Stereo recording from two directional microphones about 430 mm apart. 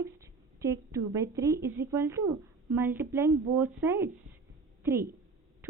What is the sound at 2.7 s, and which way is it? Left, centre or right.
A woman's voice, centre.